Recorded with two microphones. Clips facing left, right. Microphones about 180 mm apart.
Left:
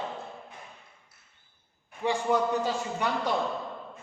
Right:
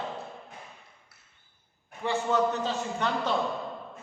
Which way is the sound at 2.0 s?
10° left (ahead or behind).